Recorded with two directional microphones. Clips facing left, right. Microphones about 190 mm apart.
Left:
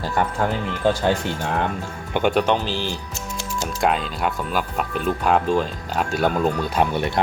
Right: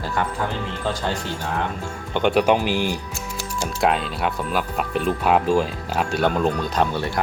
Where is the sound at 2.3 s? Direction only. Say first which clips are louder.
Right 2 dB; 10° right (ahead or behind).